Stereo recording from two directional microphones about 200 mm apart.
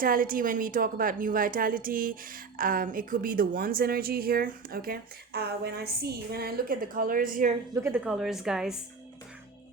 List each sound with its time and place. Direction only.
0.0 s a woman's voice: 45° right (ahead or behind)
7.7 s a woman's voice: 15° right (ahead or behind)